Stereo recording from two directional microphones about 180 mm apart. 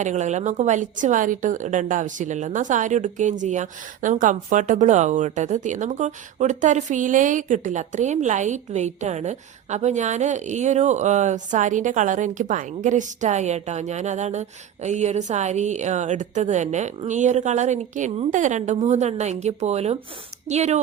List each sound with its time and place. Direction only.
0.0 s a woman's voice: 40° right (ahead or behind)